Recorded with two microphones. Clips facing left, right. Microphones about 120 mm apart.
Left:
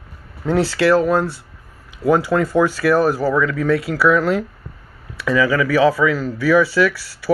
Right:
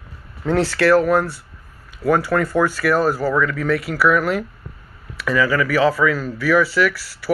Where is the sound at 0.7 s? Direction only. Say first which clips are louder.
Right 1 dB; 20° left (ahead or behind).